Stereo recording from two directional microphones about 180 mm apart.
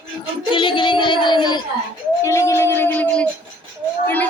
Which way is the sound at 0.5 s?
25° left (ahead or behind).